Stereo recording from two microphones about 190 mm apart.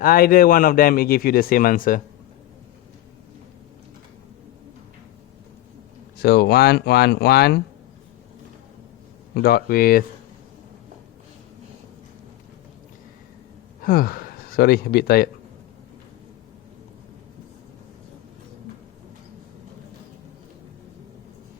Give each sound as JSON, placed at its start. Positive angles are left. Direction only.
{"t": 0.0, "sound": "a man's voice", "side_deg": 50}
{"t": 6.1, "sound": "speech", "side_deg": 55}
{"t": 9.3, "sound": "a man's voice", "side_deg": 55}
{"t": 13.8, "sound": "speech", "side_deg": 50}